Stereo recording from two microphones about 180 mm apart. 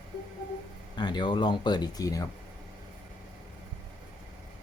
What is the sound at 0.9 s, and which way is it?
Speech, 25° left (ahead or behind).